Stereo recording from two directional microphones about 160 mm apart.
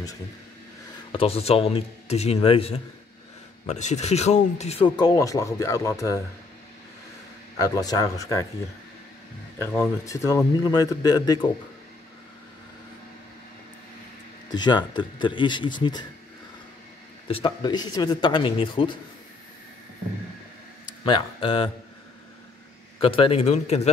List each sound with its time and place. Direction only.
1.1 s speech: 40° left (ahead or behind)
3.6 s speech: 45° left (ahead or behind); by 6.1 s 20° left (ahead or behind)
7.5 s speech: 20° left (ahead or behind)
9.8 s speech: 20° left (ahead or behind)
14.5 s speech: 25° left (ahead or behind)
17.3 s speech: 35° left (ahead or behind)
21.0 s speech: 30° left (ahead or behind)
22.9 s speech: 35° left (ahead or behind)